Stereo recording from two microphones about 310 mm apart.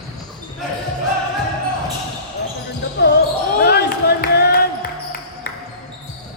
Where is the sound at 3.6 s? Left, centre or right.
Left.